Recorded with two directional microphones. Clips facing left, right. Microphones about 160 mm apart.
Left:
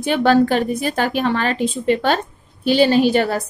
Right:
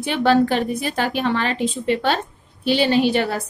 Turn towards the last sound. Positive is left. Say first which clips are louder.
# left 3 dB
turn(degrees=45)  # may be behind; listen again after turning